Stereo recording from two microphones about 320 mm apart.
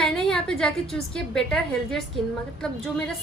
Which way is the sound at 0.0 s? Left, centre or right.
Centre.